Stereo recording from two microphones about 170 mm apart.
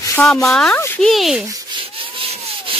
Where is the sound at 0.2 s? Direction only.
5° left (ahead or behind).